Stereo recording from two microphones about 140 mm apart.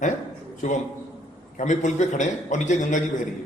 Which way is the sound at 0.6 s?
60° left (ahead or behind).